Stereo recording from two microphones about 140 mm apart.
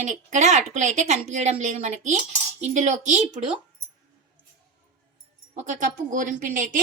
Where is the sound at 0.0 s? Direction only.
60° right (ahead or behind).